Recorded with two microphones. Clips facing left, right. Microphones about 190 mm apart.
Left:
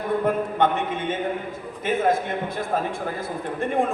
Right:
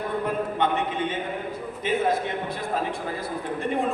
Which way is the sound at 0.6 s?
50° left (ahead or behind).